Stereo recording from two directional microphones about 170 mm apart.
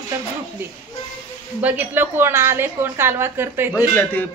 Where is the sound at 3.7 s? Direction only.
10° left (ahead or behind).